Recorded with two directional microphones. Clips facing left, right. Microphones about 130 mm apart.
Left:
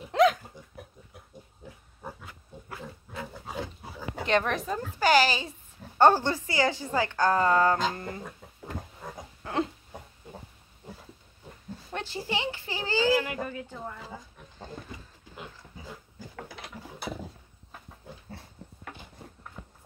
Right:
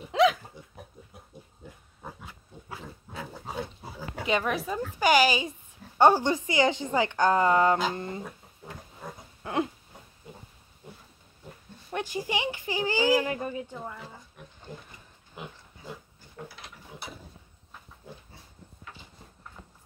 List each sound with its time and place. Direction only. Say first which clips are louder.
0.1 s hiccup: left 1 dB; centre (ahead or behind)
4.1 s a child's voice: left 1 dB; 5° right (ahead or behind); by 8.2 s 20° right (ahead or behind)
9.4 s a sound: right 1 dB; 15° right (ahead or behind)
11.9 s a child's voice: right 2 dB; 15° right (ahead or behind)